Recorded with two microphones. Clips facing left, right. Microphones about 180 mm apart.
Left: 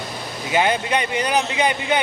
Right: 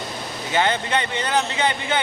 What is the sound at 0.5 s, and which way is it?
Speech, 15° left (ahead or behind).